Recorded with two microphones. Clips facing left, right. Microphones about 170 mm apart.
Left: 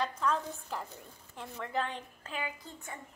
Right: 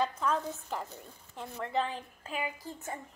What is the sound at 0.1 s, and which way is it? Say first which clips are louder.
A child's voice: right 1 dB; 5° right (ahead or behind).